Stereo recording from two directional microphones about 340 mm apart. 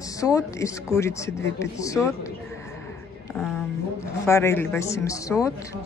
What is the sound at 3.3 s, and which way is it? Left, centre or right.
Speech, centre.